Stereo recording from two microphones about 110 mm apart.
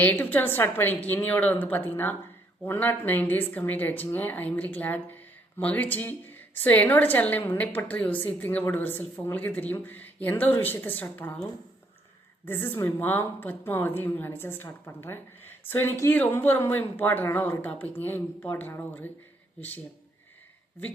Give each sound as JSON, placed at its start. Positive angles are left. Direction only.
{"t": 0.0, "sound": "speech", "side_deg": 15}
{"t": 12.5, "sound": "a woman's voice", "side_deg": 20}